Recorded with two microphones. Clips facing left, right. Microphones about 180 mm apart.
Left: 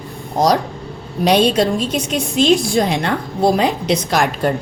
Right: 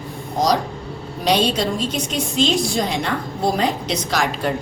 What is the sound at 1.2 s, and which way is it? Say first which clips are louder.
A woman's voice: left 5 dB; 60° left (ahead or behind).